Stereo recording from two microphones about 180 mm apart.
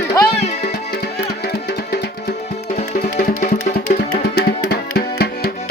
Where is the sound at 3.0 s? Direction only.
45° left (ahead or behind); by 5.5 s 65° left (ahead or behind).